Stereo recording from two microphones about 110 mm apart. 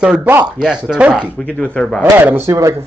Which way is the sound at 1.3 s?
10° left (ahead or behind).